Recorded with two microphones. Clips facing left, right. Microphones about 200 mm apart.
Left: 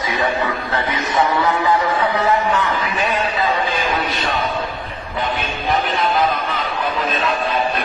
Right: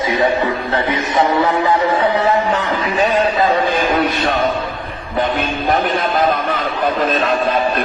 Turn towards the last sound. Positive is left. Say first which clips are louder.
# right 4 dB
turn(degrees=-45)  # may be behind; listen again after turning